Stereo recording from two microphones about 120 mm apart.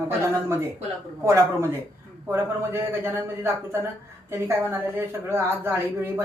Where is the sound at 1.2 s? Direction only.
25° right (ahead or behind).